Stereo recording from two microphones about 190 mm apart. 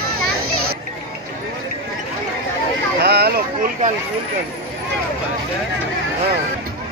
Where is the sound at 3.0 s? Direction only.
60° right (ahead or behind).